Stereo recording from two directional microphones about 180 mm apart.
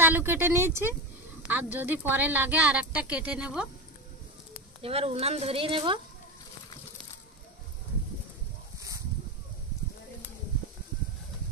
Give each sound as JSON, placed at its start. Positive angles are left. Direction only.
{"t": 0.0, "sound": "a woman's voice", "side_deg": -10}
{"t": 4.8, "sound": "speech", "side_deg": -35}
{"t": 8.7, "sound": "a sound", "side_deg": -20}